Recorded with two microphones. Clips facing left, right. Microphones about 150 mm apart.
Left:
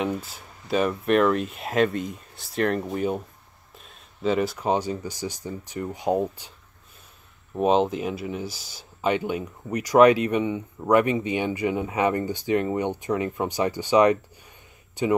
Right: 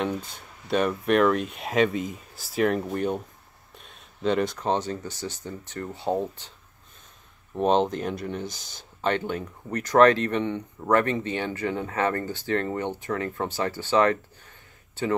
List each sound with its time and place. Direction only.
0.0 s speech: 5° left (ahead or behind)
7.5 s speech: 5° left (ahead or behind)